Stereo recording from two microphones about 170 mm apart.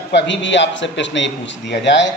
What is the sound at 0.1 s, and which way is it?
Speech, 90° left.